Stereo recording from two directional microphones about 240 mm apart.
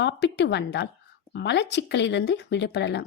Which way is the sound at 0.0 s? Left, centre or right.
Left.